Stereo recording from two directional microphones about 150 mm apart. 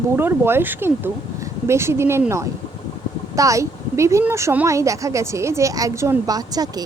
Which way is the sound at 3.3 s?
20° right (ahead or behind).